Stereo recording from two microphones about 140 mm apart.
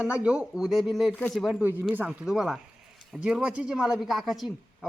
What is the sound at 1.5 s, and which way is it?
A man's voice, 10° right (ahead or behind).